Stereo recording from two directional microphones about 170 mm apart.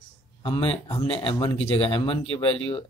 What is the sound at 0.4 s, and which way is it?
Speech, 30° left (ahead or behind).